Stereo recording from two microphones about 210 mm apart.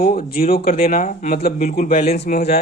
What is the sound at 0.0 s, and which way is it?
Speech, 45° left (ahead or behind).